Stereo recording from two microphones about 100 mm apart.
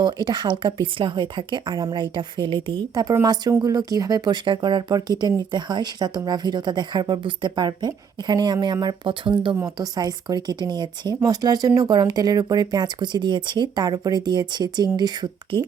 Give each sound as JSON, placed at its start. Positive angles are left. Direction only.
{"t": 0.0, "sound": "speech", "side_deg": -50}
{"t": 2.9, "sound": "speech", "side_deg": -40}
{"t": 9.7, "sound": "speech", "side_deg": -40}